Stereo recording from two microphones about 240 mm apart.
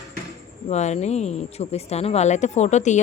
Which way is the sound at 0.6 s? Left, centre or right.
Left.